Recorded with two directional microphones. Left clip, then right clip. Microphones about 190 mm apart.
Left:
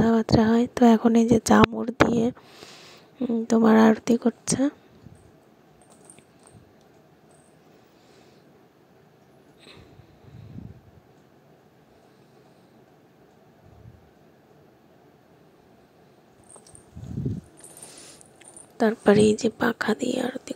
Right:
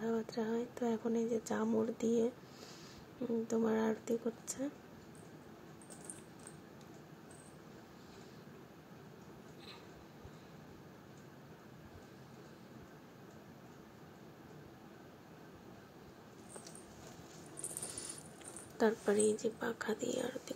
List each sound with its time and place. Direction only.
0.0 s speech: 50° left (ahead or behind)
17.8 s a sound: 35° left (ahead or behind)
18.8 s a woman's voice: 45° left (ahead or behind)